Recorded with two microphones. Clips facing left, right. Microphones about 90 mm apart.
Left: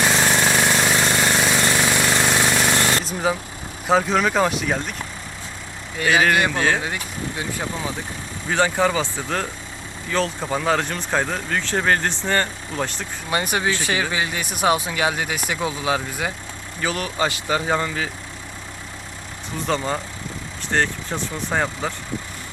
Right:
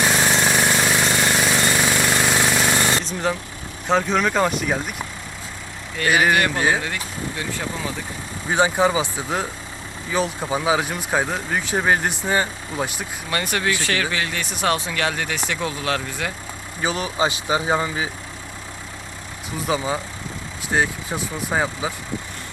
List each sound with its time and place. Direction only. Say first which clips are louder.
0.0 s vehicle: even; centre (ahead or behind)
3.0 s vehicle: left 1 dB; 5° left (ahead or behind)
3.8 s speech: left 1 dB; centre (ahead or behind)
6.0 s speech: even; 10° left (ahead or behind)
6.5 s speech: even; 5° right (ahead or behind)
6.8 s speech: even; 20° left (ahead or behind)
8.4 s speech: right 1 dB; 15° right (ahead or behind)
13.3 s speech: left 1 dB; 20° left (ahead or behind)
16.8 s speech: right 1 dB; 20° right (ahead or behind)
19.5 s speech: even; 5° right (ahead or behind)